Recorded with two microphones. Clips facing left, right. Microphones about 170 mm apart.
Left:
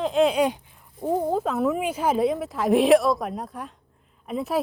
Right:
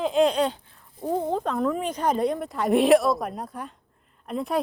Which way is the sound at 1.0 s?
5° left (ahead or behind).